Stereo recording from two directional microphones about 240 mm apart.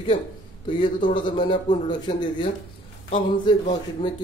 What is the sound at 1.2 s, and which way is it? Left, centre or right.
A man's voice, centre.